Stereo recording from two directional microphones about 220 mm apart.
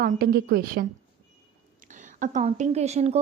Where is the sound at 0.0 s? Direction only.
45° right (ahead or behind).